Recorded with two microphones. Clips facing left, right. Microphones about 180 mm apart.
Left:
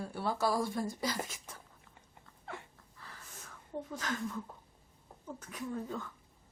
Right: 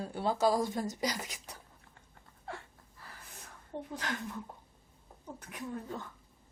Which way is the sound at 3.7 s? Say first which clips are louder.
Even; 25° right (ahead or behind).